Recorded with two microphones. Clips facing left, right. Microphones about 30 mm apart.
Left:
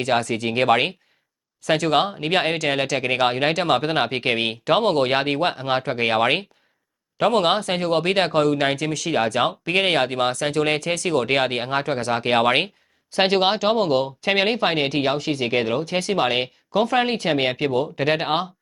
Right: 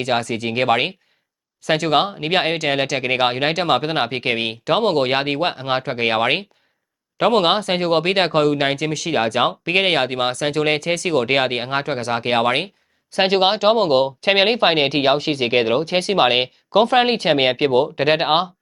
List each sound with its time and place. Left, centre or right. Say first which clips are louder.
0.2 s speech: right 1 dB; centre; by 8.3 s right
8.7 s speech: right 2 dB; centre
9.0 s speech: right 2 dB; centre
12.5 s a sound: even; centre
13.2 s speech: right 2 dB; centre
13.6 s speech: right 4 dB; right